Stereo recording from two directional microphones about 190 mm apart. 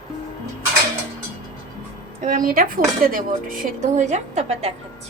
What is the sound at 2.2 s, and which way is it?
Speech, 45° right (ahead or behind).